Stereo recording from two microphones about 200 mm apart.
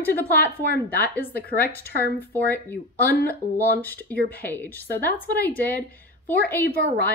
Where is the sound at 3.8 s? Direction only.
10° left (ahead or behind).